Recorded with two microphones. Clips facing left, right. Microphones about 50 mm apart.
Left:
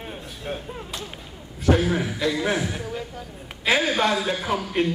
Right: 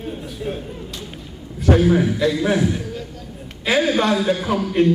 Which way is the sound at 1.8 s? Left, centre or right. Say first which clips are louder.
Right 7 dB; centre.